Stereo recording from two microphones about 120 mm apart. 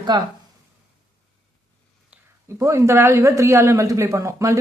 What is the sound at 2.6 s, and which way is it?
Speech, 25° right (ahead or behind).